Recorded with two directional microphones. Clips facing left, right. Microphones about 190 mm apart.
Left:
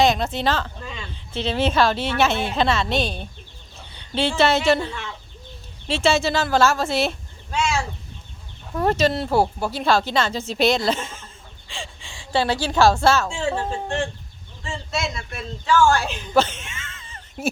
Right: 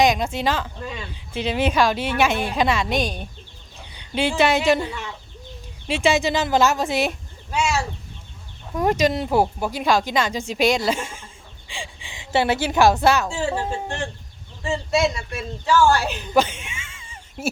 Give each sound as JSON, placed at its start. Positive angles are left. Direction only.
{"t": 0.0, "sound": "speech", "side_deg": -10}
{"t": 8.7, "sound": "a woman's voice", "side_deg": -15}
{"t": 13.2, "sound": "speech", "side_deg": -5}